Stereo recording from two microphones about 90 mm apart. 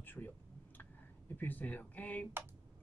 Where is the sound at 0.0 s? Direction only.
20° left (ahead or behind).